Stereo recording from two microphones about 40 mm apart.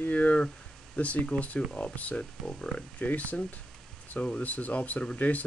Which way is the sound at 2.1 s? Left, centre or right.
Left.